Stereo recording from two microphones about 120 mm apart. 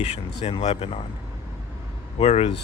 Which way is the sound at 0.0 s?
60° left (ahead or behind).